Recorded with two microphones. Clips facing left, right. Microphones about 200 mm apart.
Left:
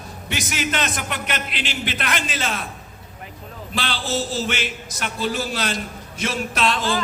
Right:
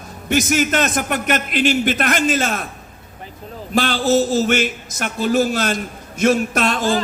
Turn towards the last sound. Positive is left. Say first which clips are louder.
# right 4 dB
turn(degrees=-45)  # may be behind; listen again after turning